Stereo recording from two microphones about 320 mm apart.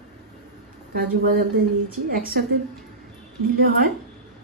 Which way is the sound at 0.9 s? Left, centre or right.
Right.